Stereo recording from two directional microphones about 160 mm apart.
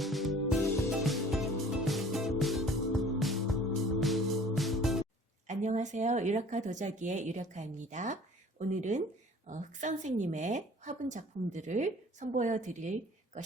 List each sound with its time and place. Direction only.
0.0 s music: centre (ahead or behind)
5.5 s a woman's voice: 45° right (ahead or behind)